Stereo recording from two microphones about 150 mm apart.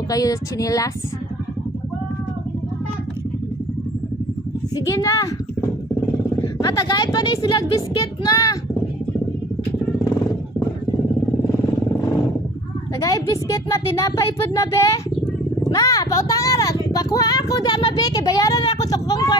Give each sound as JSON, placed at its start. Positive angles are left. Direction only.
{"t": 0.1, "sound": "speech", "side_deg": 25}
{"t": 4.7, "sound": "speech", "side_deg": 20}
{"t": 6.4, "sound": "speech", "side_deg": 25}
{"t": 13.0, "sound": "speech", "side_deg": 25}